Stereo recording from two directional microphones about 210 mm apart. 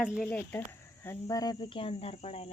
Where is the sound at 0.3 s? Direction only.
10° left (ahead or behind).